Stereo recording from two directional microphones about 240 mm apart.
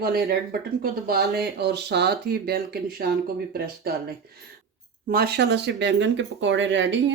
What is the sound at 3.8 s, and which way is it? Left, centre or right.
Speech, right.